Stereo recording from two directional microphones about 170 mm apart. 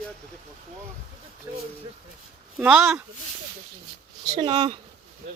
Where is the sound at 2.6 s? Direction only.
10° right (ahead or behind).